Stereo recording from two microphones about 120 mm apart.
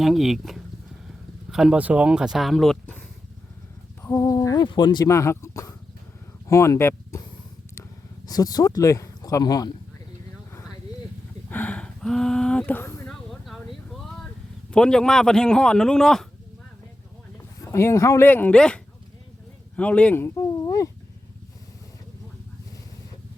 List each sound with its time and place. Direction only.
0.0 s speech: centre (ahead or behind)
4.0 s a sound: 25° left (ahead or behind)
4.6 s speech: 40° left (ahead or behind)
5.0 s speech: 25° left (ahead or behind)
8.3 s speech: 30° left (ahead or behind)
11.4 s a sound: 15° left (ahead or behind)
13.1 s a sound: centre (ahead or behind)
14.7 s speech: 5° left (ahead or behind)
17.6 s speech: 25° left (ahead or behind)